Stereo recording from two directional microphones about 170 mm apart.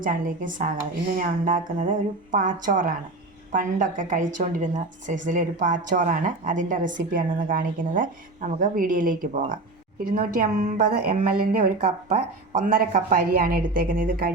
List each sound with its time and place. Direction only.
0.0 s a woman's voice: 55° right (ahead or behind)